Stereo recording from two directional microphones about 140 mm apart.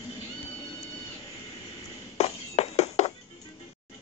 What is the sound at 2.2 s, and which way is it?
Music, 50° left (ahead or behind).